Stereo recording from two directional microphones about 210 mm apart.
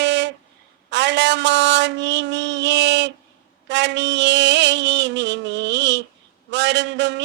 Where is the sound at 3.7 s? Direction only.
55° right (ahead or behind).